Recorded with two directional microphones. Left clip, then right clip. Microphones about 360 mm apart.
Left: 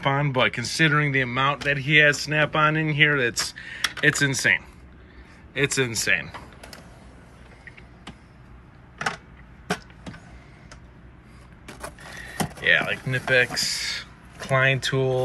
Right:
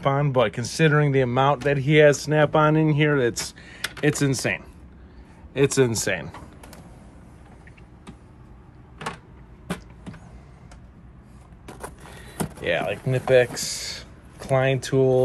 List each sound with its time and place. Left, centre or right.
0.0 s speech: centre
12.3 s speech: centre